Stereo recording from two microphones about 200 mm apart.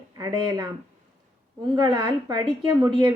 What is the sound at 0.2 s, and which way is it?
Speech, 20° right (ahead or behind).